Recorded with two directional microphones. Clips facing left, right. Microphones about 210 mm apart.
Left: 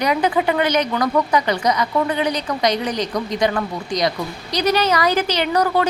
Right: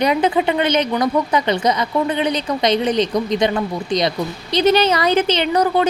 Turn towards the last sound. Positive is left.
turn(degrees=-20)  # may be behind; listen again after turning